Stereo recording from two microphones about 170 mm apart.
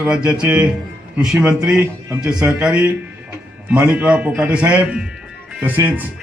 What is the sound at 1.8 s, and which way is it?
Speech, 15° right (ahead or behind).